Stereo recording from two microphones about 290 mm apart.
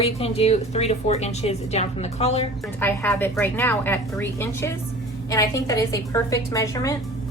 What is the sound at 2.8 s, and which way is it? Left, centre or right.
A woman's voice, centre.